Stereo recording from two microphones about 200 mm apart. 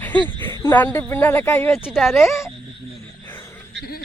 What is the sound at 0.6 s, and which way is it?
Speech, 10° left (ahead or behind).